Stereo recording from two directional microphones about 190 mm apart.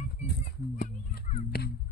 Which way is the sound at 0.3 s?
55° left (ahead or behind).